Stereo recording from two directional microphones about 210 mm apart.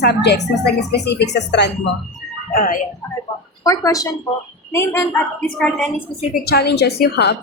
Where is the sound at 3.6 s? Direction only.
15° left (ahead or behind).